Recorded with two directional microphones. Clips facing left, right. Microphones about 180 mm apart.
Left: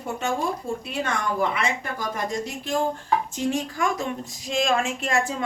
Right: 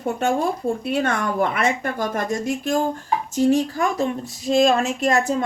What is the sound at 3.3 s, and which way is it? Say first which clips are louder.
A woman's voice: right 8 dB; 35° right (ahead or behind).